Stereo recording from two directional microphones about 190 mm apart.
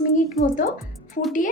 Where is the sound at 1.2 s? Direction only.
55° left (ahead or behind).